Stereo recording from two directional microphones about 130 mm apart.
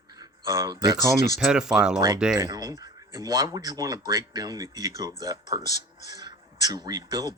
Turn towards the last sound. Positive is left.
turn(degrees=-30)  # may be behind; listen again after turning